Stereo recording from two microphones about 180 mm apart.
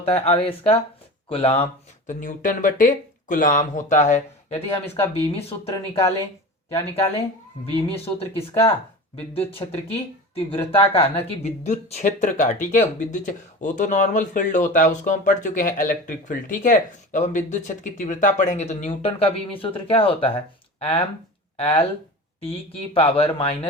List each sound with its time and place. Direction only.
0.0 s speech: 35° left (ahead or behind)
2.2 s speech: 50° left (ahead or behind)
7.7 s speech: 30° left (ahead or behind)
23.0 s speech: 30° left (ahead or behind)